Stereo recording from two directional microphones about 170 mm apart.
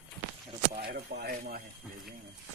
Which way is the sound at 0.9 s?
65° right (ahead or behind).